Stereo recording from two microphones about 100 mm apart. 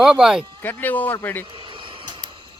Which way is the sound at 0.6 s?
20° left (ahead or behind).